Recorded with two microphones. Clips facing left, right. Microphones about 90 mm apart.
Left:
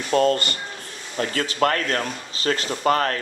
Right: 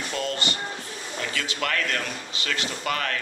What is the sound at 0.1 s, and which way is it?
Speech, 45° left (ahead or behind).